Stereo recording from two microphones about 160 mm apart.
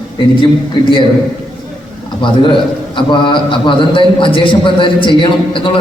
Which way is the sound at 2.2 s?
30° left (ahead or behind).